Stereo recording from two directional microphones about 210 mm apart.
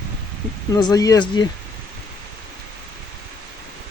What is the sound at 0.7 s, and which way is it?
Speech, 20° left (ahead or behind).